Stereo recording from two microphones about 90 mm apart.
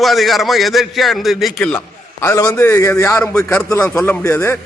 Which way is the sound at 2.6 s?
30° left (ahead or behind).